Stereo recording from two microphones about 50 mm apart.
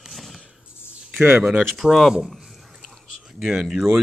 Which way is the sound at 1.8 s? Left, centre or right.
Centre.